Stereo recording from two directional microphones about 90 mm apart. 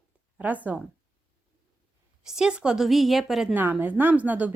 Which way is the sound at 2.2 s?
5° right (ahead or behind).